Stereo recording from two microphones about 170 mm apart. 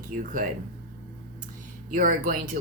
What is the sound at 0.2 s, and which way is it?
Speech, 50° right (ahead or behind).